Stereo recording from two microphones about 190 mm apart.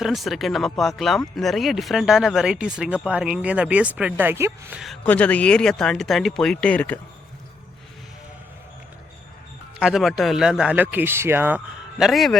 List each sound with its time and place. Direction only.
0.0 s speech: centre (ahead or behind)
4.8 s speech: 5° left (ahead or behind)
9.8 s speech: centre (ahead or behind)